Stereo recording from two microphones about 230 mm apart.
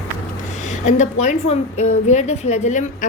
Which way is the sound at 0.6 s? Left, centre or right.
Left.